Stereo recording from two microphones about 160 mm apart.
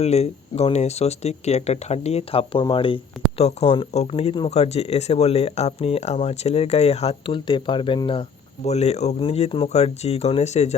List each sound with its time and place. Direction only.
0.0 s speech: 40° left (ahead or behind)